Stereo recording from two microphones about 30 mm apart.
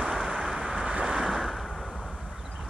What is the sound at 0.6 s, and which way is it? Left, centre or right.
Vehicle, right.